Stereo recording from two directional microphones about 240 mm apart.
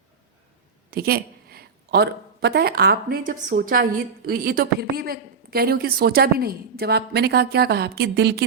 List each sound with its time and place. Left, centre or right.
0.9 s a woman's voice: right